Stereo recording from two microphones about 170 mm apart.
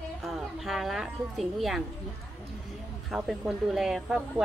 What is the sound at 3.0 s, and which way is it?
Speech, 5° right (ahead or behind).